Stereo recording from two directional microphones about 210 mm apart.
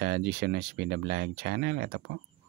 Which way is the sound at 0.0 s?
50° right (ahead or behind).